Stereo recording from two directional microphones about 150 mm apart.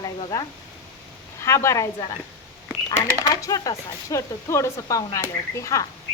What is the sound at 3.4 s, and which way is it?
Speech, 25° left (ahead or behind).